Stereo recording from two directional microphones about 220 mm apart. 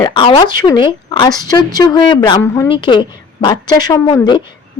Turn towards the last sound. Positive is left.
turn(degrees=20)  # may be behind; listen again after turning